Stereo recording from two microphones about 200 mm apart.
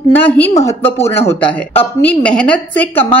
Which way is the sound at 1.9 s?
5° left (ahead or behind).